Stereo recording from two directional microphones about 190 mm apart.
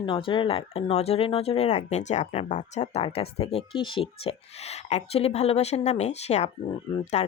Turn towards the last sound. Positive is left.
turn(degrees=35)  # may be behind; listen again after turning